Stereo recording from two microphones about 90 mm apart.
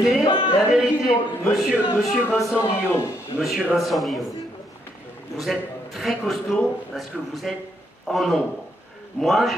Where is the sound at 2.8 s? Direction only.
25° left (ahead or behind).